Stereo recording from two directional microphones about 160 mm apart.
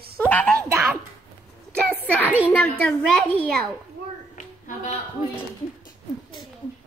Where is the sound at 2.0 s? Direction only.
10° left (ahead or behind).